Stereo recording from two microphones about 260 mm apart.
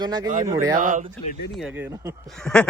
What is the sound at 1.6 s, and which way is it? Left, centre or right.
Speech, centre.